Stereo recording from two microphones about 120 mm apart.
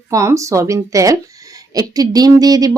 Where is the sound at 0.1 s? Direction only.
25° right (ahead or behind).